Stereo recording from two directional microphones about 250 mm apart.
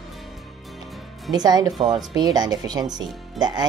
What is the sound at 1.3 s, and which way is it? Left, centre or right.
Speech, centre.